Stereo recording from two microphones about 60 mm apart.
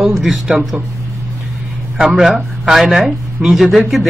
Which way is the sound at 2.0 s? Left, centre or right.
Centre.